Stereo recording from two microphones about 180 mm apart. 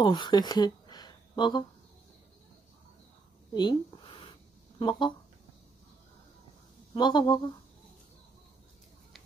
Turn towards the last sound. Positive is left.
turn(degrees=25)  # may be behind; listen again after turning